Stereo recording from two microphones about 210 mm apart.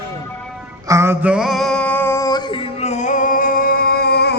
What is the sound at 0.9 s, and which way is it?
Male singing, 10° right (ahead or behind).